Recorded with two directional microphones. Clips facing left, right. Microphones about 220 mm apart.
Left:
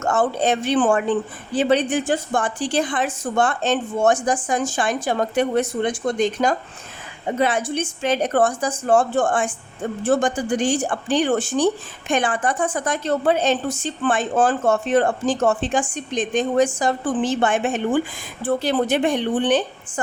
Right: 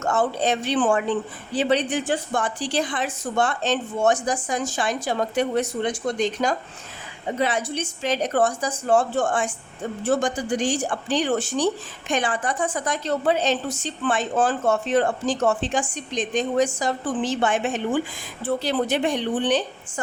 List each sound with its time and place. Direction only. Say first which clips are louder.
0.0 s speech: left 2 dB; 50° left (ahead or behind)